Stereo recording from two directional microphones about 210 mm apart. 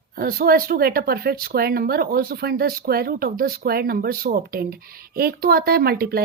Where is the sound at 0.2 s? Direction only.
45° right (ahead or behind).